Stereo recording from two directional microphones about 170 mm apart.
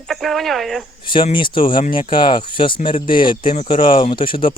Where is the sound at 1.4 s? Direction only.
30° left (ahead or behind).